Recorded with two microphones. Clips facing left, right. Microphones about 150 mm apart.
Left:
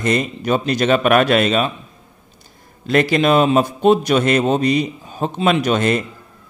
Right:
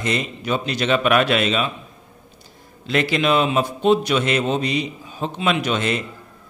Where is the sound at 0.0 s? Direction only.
45° left (ahead or behind).